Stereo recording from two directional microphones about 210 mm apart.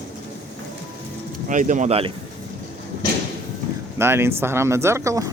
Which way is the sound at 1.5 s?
35° right (ahead or behind).